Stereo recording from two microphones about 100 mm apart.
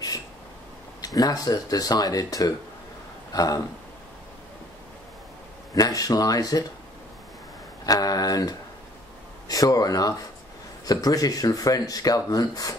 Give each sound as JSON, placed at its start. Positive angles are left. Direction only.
{"t": 1.0, "sound": "speech", "side_deg": 40}
{"t": 5.8, "sound": "speech", "side_deg": 40}
{"t": 7.8, "sound": "speech", "side_deg": 40}